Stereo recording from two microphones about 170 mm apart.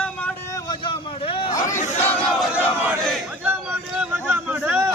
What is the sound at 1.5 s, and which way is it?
Crowd, 50° left (ahead or behind).